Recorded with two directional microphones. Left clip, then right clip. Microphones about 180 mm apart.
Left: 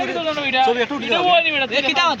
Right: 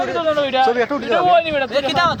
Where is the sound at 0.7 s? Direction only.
60° right (ahead or behind).